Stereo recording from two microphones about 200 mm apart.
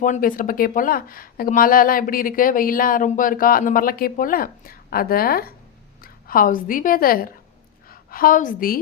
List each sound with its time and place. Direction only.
0.0 s a woman's voice: 40° left (ahead or behind)